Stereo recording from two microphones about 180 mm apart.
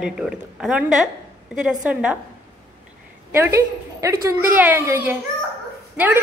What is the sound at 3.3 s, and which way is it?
A woman's voice, 15° right (ahead or behind).